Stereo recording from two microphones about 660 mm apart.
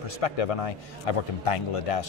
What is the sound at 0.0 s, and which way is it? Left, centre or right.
A man's voice, left.